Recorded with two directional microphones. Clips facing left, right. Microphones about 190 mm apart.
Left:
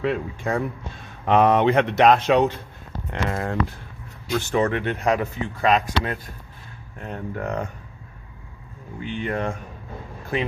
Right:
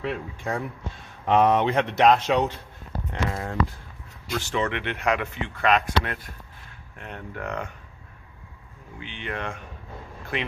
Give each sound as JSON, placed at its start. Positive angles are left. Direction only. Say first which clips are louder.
{"t": 0.0, "sound": "speech", "louder": "left 5 dB", "side_deg": 65}
{"t": 3.1, "sound": "speech", "louder": "left 4 dB", "side_deg": 65}
{"t": 4.3, "sound": "speech", "louder": "left 5 dB", "side_deg": 50}
{"t": 9.0, "sound": "speech", "louder": "left 7 dB", "side_deg": 40}